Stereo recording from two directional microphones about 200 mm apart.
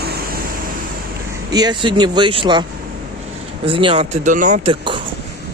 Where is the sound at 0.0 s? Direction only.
50° right (ahead or behind).